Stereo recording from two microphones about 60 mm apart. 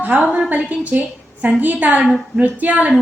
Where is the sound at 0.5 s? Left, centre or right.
Right.